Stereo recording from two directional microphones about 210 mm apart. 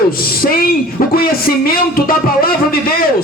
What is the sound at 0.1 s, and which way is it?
Speech, 45° left (ahead or behind).